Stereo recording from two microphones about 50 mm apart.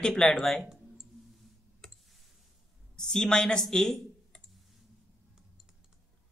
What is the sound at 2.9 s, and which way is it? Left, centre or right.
Speech, centre.